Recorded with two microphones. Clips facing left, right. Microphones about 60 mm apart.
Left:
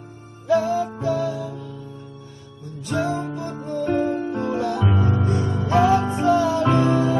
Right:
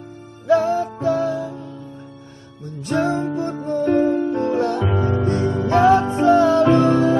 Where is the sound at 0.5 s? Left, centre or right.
Right.